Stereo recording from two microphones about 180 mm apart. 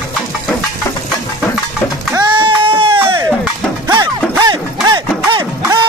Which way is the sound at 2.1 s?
25° right (ahead or behind).